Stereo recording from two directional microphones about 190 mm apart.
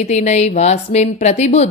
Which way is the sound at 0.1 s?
35° left (ahead or behind).